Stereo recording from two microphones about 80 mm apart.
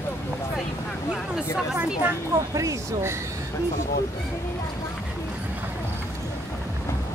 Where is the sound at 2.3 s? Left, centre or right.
Right.